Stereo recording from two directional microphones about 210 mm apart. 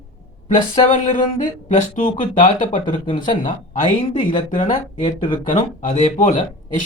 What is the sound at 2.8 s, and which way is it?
Speech, 20° left (ahead or behind).